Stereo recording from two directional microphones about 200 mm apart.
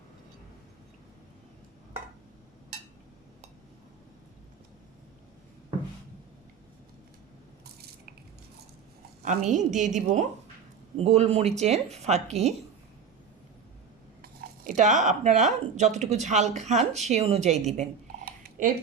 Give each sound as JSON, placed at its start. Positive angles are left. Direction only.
{"t": 7.6, "sound": "drip", "side_deg": -50}
{"t": 9.2, "sound": "speech", "side_deg": -35}
{"t": 14.2, "sound": "speech", "side_deg": -45}